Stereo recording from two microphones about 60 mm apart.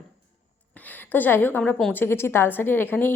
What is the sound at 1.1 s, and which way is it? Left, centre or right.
A woman's voice, left.